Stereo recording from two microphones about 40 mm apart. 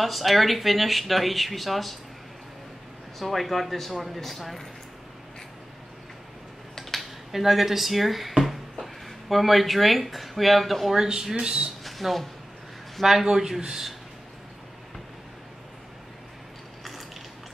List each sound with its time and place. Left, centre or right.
0.0 s speech: centre
3.2 s speech: centre
6.7 s speech: centre
11.0 s a man's voice: centre
11.8 s a sound: centre
12.9 s a man's voice: centre